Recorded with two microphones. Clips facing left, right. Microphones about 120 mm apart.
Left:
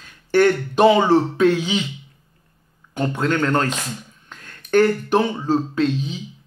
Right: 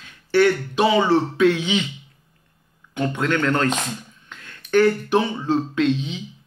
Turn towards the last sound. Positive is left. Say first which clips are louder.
# even
turn(degrees=35)  # may be behind; listen again after turning